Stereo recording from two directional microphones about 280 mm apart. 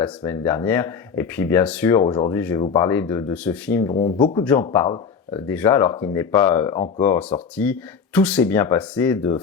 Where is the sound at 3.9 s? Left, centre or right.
Centre.